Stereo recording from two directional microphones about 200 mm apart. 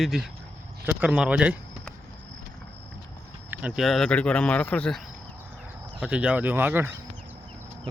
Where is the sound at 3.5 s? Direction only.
10° right (ahead or behind).